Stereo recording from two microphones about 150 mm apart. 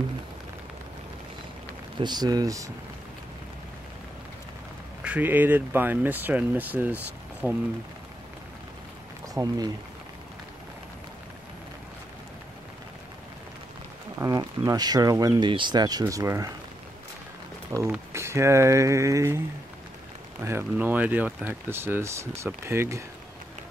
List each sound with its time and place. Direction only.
2.0 s speech: 30° right (ahead or behind)
5.0 s speech: 10° right (ahead or behind)
9.3 s speech: 25° right (ahead or behind)
14.2 s speech: 20° right (ahead or behind)
17.7 s speech: 15° right (ahead or behind)
20.4 s speech: 15° right (ahead or behind)